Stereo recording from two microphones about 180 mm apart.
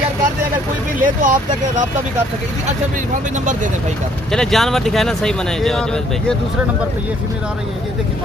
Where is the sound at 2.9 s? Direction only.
45° right (ahead or behind).